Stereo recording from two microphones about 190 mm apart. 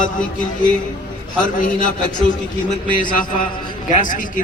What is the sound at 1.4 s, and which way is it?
Speech, 45° left (ahead or behind).